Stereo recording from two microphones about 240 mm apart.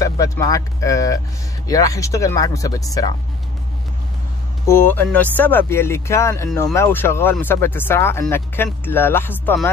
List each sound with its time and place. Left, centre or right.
0.0 s speech: centre
4.6 s speech: centre